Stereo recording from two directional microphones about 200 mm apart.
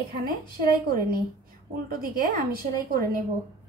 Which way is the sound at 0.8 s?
50° right (ahead or behind).